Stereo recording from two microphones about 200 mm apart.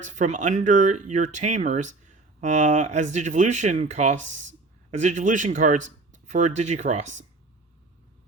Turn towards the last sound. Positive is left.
turn(degrees=-35)  # may be behind; listen again after turning